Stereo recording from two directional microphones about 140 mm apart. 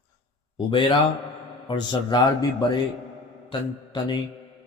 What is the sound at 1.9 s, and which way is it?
Speech, 30° left (ahead or behind).